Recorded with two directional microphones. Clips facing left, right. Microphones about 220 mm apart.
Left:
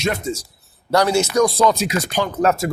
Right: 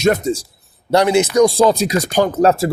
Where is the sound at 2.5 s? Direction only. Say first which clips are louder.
Right 4 dB; 30° right (ahead or behind).